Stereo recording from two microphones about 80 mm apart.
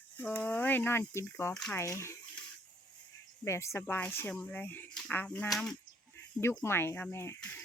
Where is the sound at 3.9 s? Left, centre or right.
Left.